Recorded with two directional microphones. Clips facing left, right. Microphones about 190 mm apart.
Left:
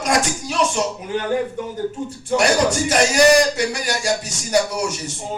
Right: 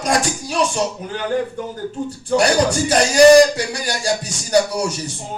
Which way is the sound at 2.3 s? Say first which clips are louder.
Right 1 dB; 30° right (ahead or behind).